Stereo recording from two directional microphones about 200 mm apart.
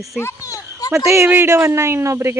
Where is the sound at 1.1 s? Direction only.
15° right (ahead or behind).